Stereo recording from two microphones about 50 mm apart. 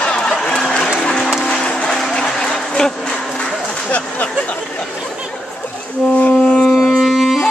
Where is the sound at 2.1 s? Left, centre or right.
Centre.